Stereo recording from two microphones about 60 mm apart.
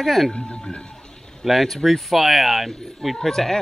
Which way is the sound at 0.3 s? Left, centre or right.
Centre.